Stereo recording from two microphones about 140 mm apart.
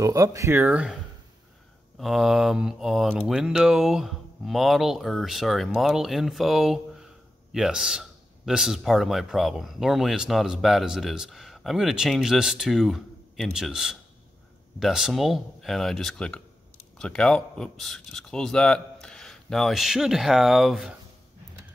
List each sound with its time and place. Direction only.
0.0 s a man's voice: 25° right (ahead or behind); by 20.9 s centre (ahead or behind)